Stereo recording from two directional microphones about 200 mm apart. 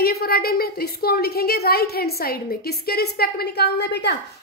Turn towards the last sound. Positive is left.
turn(degrees=55)  # may be behind; listen again after turning